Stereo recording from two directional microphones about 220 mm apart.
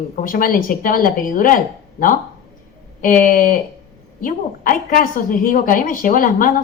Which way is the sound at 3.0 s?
40° left (ahead or behind).